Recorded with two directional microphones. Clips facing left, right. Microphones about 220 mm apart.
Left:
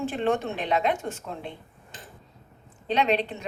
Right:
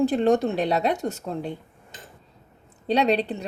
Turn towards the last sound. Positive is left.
turn(degrees=-35)  # may be behind; listen again after turning